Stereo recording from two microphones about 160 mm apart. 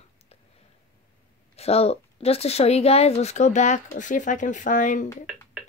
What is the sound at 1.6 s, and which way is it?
A woman's voice, 40° left (ahead or behind).